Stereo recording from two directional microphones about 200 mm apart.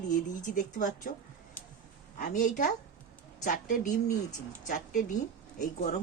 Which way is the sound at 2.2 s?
40° left (ahead or behind).